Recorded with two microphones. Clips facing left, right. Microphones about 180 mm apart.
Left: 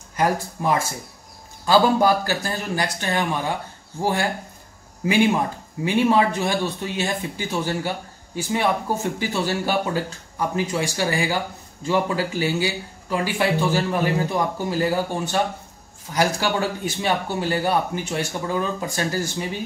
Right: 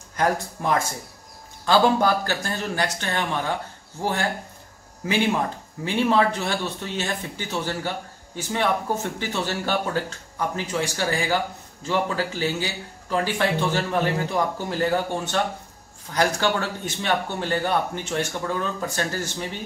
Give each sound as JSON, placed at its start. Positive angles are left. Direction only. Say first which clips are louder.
{"t": 0.2, "sound": "speech", "louder": "left 1 dB", "side_deg": 5}
{"t": 5.9, "sound": "speech", "louder": "left 2 dB", "side_deg": 15}